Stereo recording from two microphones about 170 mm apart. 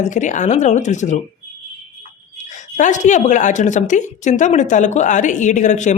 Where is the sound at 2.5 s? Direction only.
45° left (ahead or behind).